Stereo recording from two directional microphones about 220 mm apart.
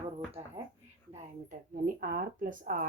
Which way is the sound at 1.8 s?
40° right (ahead or behind).